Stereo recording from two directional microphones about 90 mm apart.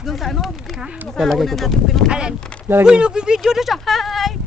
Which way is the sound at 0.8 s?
10° right (ahead or behind).